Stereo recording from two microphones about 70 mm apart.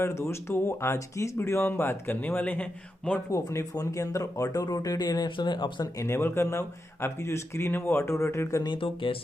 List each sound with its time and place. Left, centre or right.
0.0 s speech: left
1.7 s speech: left
3.3 s speech: left
4.5 s speech: left
5.9 s speech: left